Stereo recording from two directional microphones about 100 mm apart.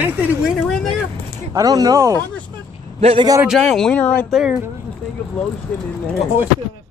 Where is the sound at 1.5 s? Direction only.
40° right (ahead or behind).